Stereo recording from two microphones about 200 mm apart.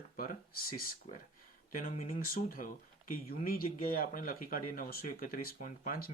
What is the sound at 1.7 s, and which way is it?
Speech, 45° left (ahead or behind).